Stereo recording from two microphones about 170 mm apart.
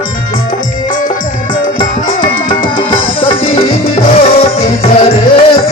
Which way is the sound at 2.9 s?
30° left (ahead or behind).